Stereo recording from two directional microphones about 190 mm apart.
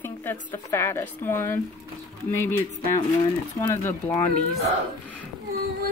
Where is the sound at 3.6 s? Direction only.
15° left (ahead or behind).